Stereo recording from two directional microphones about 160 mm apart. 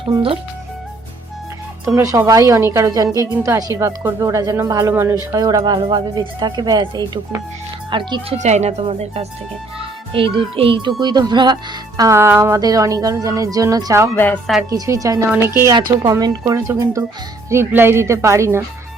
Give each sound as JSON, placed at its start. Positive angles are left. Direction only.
{"t": 0.0, "sound": "a child's voice", "side_deg": -35}
{"t": 2.0, "sound": "a child's voice", "side_deg": -20}
{"t": 8.4, "sound": "speech", "side_deg": -45}
{"t": 9.7, "sound": "music", "side_deg": -35}
{"t": 10.3, "sound": "a child's voice", "side_deg": -35}